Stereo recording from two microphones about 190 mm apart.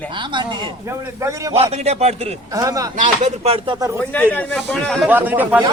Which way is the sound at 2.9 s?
40° right (ahead or behind).